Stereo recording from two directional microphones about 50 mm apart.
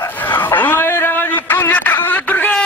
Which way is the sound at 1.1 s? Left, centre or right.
Left.